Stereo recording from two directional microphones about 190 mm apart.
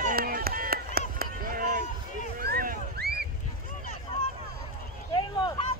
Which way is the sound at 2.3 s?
50° right (ahead or behind).